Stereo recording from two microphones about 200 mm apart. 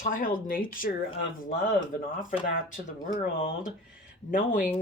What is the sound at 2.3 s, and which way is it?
Speech, 40° left (ahead or behind).